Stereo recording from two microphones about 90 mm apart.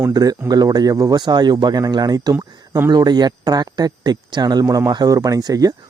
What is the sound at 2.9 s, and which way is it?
Speech, 50° right (ahead or behind).